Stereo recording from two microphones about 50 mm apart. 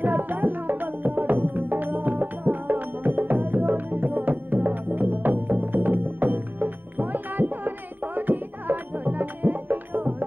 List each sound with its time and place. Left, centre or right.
0.0 s music: right